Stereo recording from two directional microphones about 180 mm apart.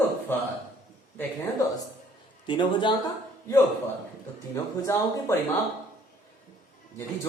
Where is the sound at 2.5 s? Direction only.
25° left (ahead or behind).